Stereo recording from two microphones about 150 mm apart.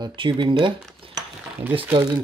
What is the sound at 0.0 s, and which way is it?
Speech, 35° right (ahead or behind).